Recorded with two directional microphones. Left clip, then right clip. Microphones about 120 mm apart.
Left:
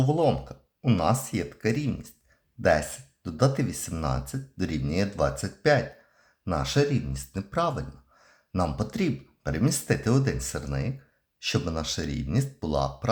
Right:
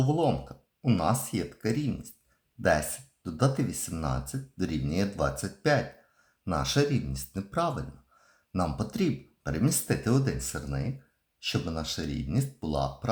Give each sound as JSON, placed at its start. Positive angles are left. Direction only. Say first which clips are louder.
{"t": 0.0, "sound": "speech", "louder": "left 3 dB", "side_deg": 30}